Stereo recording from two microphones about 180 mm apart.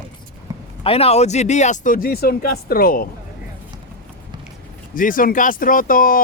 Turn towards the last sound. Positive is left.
turn(degrees=50)  # may be behind; listen again after turning